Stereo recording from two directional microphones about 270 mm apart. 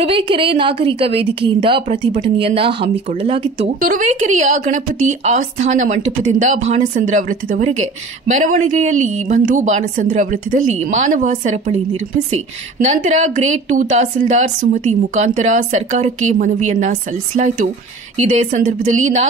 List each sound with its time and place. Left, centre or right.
0.0 s a woman's voice: centre
3.8 s a woman's voice: right
12.8 s a woman's voice: right
18.1 s a woman's voice: right